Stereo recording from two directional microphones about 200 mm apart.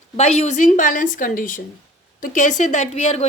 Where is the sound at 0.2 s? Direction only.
35° left (ahead or behind).